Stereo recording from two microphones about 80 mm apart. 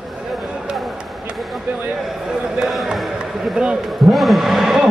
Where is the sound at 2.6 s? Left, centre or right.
Centre.